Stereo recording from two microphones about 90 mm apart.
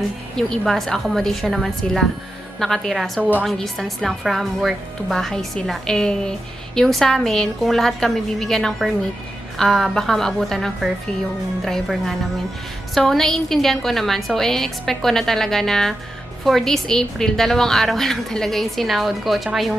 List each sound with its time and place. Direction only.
0.4 s speech: 5° left (ahead or behind)
3.2 s a woman's voice: 20° right (ahead or behind)
3.4 s speech: centre (ahead or behind)